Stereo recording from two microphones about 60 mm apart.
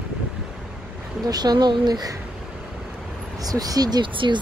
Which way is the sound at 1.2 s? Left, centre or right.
Right.